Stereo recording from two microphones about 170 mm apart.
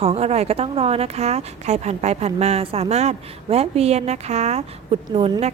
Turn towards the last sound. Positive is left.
turn(degrees=-35)  # may be behind; listen again after turning